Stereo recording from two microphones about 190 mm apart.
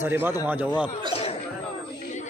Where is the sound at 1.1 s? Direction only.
30° left (ahead or behind).